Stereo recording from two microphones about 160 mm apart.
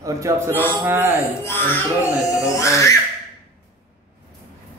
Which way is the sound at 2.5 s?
20° left (ahead or behind).